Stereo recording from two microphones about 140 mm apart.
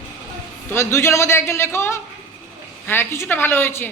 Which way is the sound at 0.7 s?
20° left (ahead or behind).